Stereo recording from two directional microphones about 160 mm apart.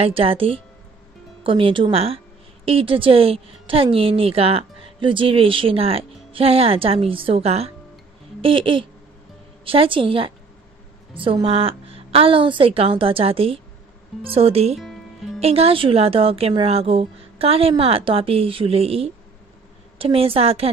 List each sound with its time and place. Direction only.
0.0 s a woman's voice: 35° right (ahead or behind)
14.8 s music: centre (ahead or behind)
15.4 s a woman's voice: 40° right (ahead or behind)